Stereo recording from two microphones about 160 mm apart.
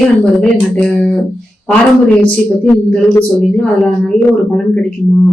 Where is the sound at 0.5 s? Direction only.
5° left (ahead or behind).